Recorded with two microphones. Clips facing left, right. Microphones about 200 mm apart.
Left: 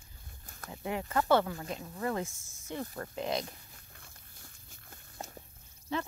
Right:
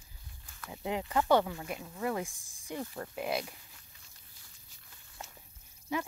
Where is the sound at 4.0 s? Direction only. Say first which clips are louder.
Left 7 dB; 50° left (ahead or behind).